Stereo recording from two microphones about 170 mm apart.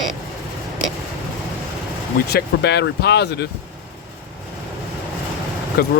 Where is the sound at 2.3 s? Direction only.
80° left.